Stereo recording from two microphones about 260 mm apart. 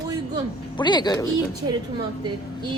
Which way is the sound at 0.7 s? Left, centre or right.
Centre.